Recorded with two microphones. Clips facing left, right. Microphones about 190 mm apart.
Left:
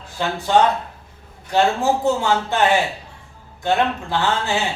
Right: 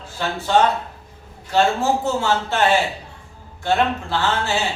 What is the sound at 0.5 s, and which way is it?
Speech, 15° left (ahead or behind).